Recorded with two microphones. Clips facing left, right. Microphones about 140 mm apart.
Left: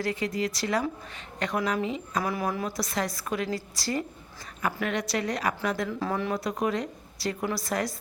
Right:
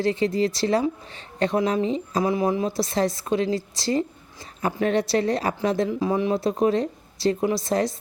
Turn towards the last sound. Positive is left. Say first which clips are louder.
# right 7 dB
turn(degrees=-25)  # may be behind; listen again after turning